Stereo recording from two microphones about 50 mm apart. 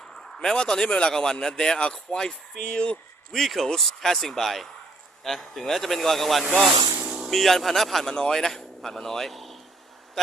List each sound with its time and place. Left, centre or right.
0.2 s speech: centre
3.3 s a man's voice: centre
7.0 s vehicle: centre
7.3 s a man's voice: centre